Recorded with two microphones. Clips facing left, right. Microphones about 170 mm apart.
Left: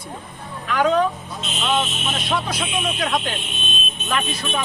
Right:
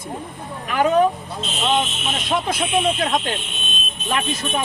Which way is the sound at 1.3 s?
30° right (ahead or behind).